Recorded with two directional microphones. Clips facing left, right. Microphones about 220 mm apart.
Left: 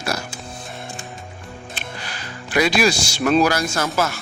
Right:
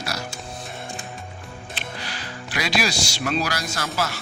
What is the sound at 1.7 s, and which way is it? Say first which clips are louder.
Music: right 1 dB; 50° left (ahead or behind).